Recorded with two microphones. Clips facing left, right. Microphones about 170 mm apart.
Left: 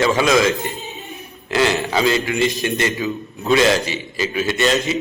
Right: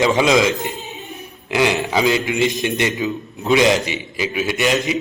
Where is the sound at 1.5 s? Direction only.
15° right (ahead or behind).